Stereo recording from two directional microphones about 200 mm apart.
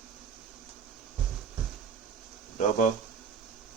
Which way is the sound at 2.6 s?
40° left (ahead or behind).